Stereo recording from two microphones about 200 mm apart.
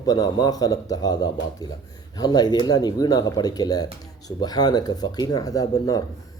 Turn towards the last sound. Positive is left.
turn(degrees=20)  # may be behind; listen again after turning